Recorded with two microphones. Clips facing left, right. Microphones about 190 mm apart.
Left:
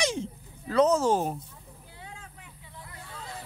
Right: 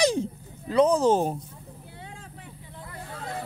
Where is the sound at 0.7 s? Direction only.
15° right (ahead or behind).